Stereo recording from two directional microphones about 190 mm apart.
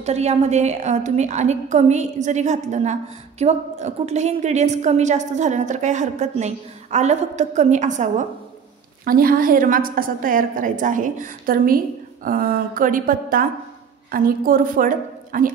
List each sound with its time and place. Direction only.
0.0 s a woman's voice: 35° right (ahead or behind)